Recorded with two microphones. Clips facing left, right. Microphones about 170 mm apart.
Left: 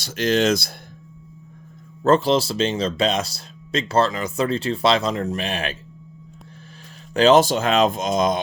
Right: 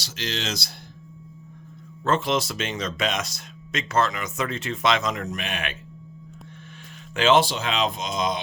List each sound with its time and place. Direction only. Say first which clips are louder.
0.0 s speech: left 12 dB; 50° left (ahead or behind)
2.0 s speech: left 6 dB; 35° left (ahead or behind)
7.1 s speech: left 5 dB; 40° left (ahead or behind)